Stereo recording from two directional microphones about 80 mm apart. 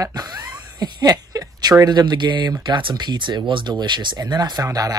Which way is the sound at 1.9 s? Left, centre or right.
Right.